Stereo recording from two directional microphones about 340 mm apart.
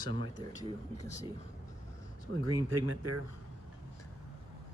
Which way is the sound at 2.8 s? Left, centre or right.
Right.